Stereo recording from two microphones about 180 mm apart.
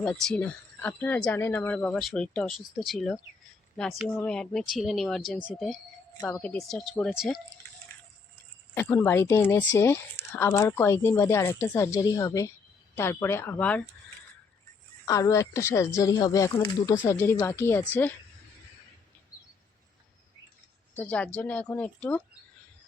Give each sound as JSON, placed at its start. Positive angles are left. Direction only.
{"t": 0.0, "sound": "speech", "side_deg": 5}
{"t": 8.7, "sound": "speech", "side_deg": 15}
{"t": 15.0, "sound": "speech", "side_deg": 20}
{"t": 20.9, "sound": "speech", "side_deg": 10}